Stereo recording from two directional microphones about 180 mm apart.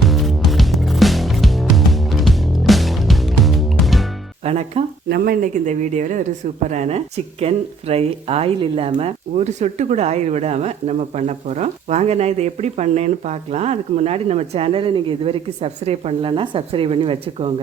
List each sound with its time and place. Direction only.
0.0 s music: centre (ahead or behind)
4.4 s speech: 35° right (ahead or behind)
5.0 s speech: 60° right (ahead or behind); by 17.5 s 30° right (ahead or behind)